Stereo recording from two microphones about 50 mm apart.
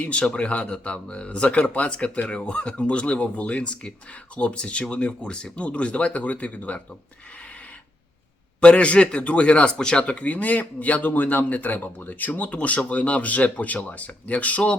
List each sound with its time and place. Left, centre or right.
0.0 s speech: left
8.6 s speech: left